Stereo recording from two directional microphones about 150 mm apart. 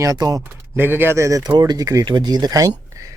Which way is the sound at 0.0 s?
25° right (ahead or behind).